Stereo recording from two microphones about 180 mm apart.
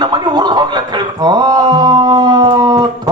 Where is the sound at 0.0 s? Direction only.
25° right (ahead or behind).